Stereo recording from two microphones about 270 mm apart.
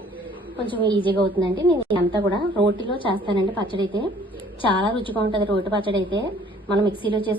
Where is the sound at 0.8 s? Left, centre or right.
Centre.